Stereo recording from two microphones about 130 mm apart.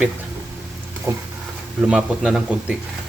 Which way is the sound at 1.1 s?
25° right (ahead or behind).